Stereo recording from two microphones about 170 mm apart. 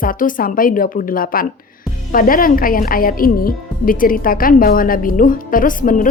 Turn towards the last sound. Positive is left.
turn(degrees=50)  # may be behind; listen again after turning